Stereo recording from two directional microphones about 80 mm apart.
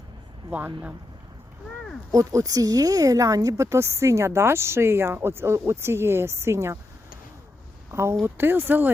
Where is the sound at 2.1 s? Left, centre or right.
Right.